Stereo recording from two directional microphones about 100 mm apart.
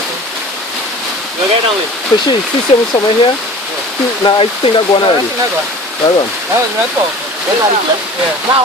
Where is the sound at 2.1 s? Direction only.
45° left (ahead or behind).